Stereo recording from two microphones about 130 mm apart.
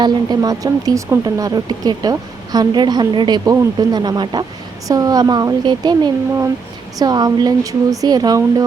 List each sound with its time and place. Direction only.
0.0 s a woman's voice: 30° right (ahead or behind)